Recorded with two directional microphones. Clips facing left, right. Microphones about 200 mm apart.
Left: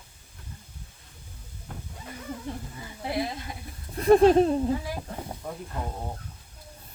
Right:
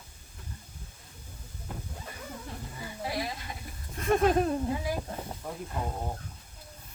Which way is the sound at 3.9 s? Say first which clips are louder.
Left 8 dB; 35° left (ahead or behind).